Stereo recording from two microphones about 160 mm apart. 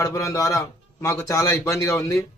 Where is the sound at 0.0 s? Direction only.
20° left (ahead or behind).